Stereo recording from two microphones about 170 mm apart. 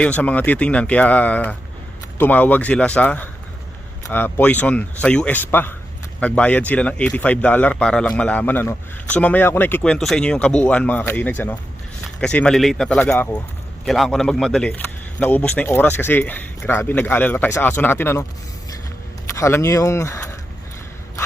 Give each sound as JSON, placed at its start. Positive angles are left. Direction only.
{"t": 0.0, "sound": "speech", "side_deg": 10}
{"t": 19.3, "sound": "speech", "side_deg": 15}